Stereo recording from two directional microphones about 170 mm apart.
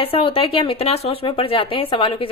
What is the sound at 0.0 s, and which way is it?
A woman's voice, 30° left (ahead or behind).